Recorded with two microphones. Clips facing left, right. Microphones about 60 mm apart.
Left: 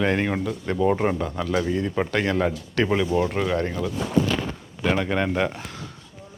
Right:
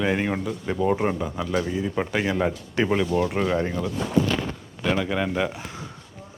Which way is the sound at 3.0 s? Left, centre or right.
Left.